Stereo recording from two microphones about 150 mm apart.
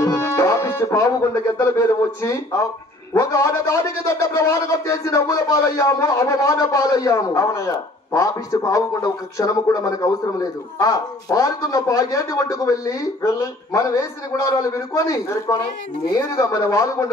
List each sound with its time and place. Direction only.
0.0 s music: 20° left (ahead or behind)
1.8 s a man's voice: 20° left (ahead or behind)